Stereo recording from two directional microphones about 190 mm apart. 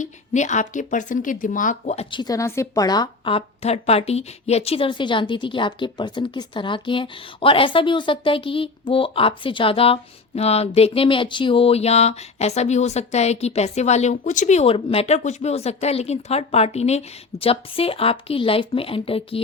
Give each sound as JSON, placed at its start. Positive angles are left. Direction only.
{"t": 0.0, "sound": "speech", "side_deg": 40}